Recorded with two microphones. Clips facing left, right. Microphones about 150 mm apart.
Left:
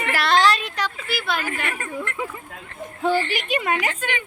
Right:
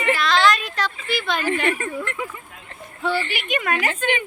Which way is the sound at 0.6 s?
10° left (ahead or behind).